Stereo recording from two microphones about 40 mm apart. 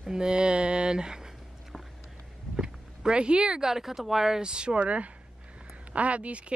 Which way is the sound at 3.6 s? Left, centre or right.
Centre.